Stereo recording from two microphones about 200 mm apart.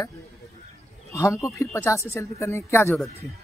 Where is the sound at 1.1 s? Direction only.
15° left (ahead or behind).